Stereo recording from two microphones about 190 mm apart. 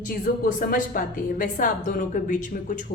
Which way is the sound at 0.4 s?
45° left (ahead or behind).